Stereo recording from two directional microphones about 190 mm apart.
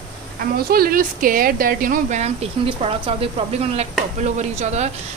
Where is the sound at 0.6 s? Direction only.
50° right (ahead or behind).